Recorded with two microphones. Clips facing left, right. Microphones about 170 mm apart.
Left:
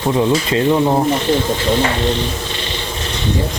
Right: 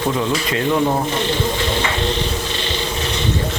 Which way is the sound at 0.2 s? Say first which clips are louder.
Left 5 dB; 25° left (ahead or behind).